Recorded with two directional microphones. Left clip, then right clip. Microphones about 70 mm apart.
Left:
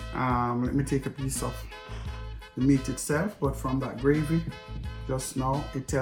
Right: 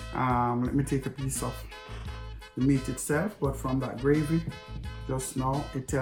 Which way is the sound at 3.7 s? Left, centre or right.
Right.